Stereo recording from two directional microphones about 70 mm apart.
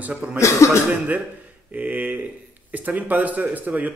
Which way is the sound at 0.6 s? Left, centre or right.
Left.